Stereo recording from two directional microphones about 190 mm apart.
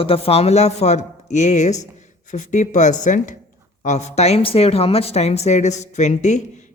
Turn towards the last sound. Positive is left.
turn(degrees=40)  # may be behind; listen again after turning